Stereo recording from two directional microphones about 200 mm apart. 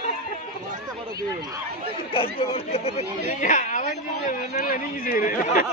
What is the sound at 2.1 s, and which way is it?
Speech, 30° left (ahead or behind).